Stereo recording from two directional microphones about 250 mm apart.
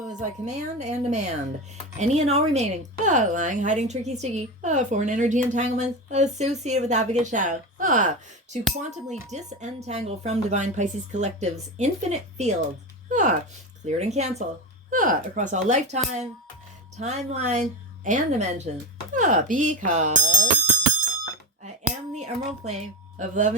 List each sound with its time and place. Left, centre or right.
0.2 s speech: right
17.0 s speech: right
22.1 s speech: right